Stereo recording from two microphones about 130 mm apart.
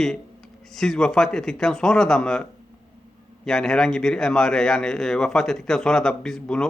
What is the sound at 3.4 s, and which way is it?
A man's voice, 5° left (ahead or behind).